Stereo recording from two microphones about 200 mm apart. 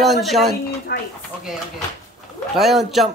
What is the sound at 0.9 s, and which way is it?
Speech, 50° left (ahead or behind).